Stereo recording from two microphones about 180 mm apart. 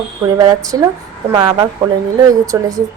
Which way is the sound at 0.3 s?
20° right (ahead or behind).